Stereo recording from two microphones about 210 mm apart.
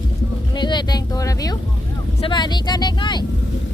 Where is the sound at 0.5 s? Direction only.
20° left (ahead or behind).